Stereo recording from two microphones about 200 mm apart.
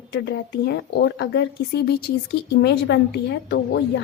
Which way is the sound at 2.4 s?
60° left (ahead or behind).